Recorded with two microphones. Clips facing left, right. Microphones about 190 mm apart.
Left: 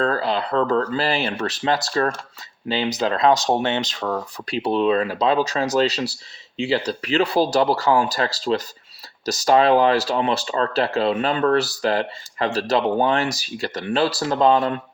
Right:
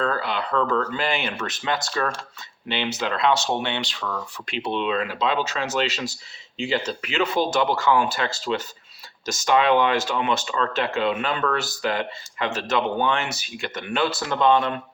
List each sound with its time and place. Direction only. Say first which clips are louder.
0.0 s speech: left 4 dB; 35° left (ahead or behind)